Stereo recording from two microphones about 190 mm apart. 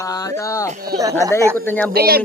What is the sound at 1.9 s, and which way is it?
Speech, 55° right (ahead or behind).